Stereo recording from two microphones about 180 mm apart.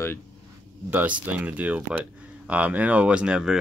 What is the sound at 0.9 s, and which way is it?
Speech, 10° right (ahead or behind).